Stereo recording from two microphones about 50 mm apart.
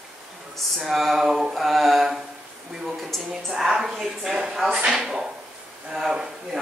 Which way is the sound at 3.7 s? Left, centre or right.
Centre.